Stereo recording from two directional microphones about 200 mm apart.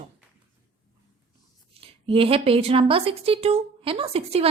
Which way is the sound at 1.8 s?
30° right (ahead or behind).